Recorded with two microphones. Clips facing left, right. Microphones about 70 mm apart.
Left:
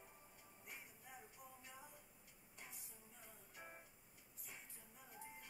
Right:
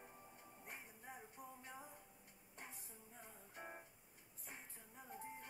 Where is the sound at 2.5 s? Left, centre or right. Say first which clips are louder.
Right 4 dB; right.